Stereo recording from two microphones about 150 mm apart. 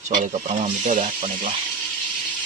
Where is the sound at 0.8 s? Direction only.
55° right (ahead or behind).